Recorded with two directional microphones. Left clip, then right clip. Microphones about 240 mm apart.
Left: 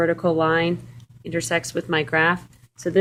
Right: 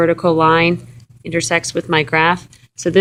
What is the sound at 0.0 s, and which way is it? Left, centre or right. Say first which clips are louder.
Speech: right 7 dB; right.